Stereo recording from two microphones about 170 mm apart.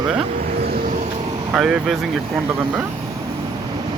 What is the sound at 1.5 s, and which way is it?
Speech, 5° right (ahead or behind).